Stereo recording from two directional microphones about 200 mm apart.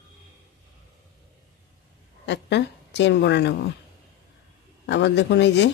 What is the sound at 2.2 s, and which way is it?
A woman's voice, 60° left (ahead or behind).